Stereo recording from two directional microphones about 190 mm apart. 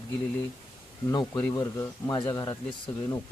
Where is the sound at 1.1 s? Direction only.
20° left (ahead or behind).